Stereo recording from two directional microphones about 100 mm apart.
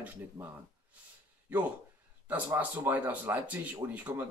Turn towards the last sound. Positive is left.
turn(degrees=-15)  # may be behind; listen again after turning